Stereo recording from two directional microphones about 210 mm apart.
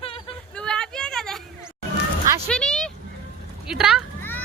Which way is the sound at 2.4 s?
5° left (ahead or behind).